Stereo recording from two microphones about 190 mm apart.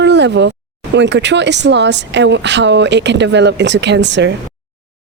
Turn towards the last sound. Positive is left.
turn(degrees=-70)  # may be behind; listen again after turning